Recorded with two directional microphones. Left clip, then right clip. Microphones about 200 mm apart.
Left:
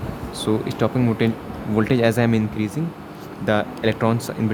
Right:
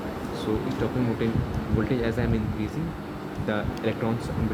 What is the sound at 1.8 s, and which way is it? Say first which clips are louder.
Speech: left 11 dB; 65° left (ahead or behind).